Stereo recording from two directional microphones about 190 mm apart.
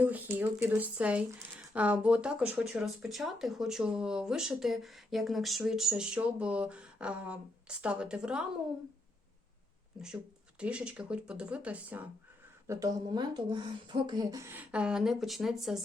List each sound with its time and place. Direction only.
0.0 s speech: 10° right (ahead or behind)
10.6 s speech: 5° right (ahead or behind)